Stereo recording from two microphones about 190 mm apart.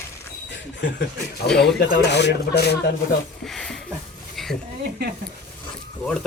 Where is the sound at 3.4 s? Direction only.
5° left (ahead or behind).